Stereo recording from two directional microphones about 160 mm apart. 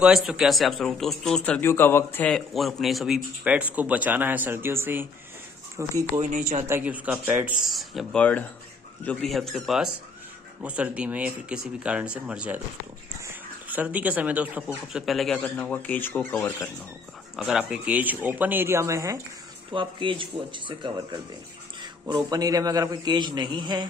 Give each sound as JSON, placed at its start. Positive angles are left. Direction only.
{"t": 0.0, "sound": "speech", "side_deg": -5}
{"t": 17.4, "sound": "speech", "side_deg": -5}
{"t": 19.7, "sound": "a man's voice", "side_deg": -30}